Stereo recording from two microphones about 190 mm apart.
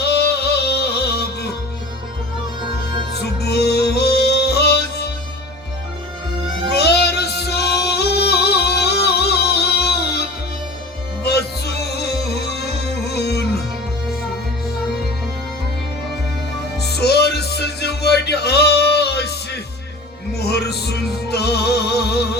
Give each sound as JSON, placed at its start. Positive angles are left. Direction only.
{"t": 0.0, "sound": "music", "side_deg": 60}
{"t": 2.6, "sound": "music", "side_deg": -25}
{"t": 3.1, "sound": "music", "side_deg": 60}
{"t": 6.7, "sound": "yodeling", "side_deg": 60}
{"t": 11.2, "sound": "music", "side_deg": 60}
{"t": 16.7, "sound": "music", "side_deg": 60}